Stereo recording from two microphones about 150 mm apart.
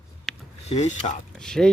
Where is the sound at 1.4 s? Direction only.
5° left (ahead or behind).